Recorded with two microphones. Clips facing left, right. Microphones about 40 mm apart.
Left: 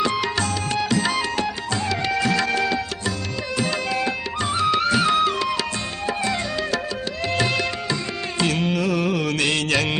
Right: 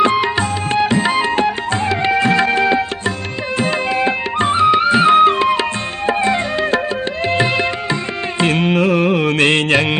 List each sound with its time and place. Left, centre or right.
0.0 s tabla: right
3.6 s music: right
8.4 s carnatic music: right